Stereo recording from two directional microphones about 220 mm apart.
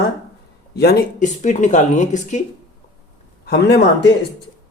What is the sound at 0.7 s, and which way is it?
Speech, 45° left (ahead or behind).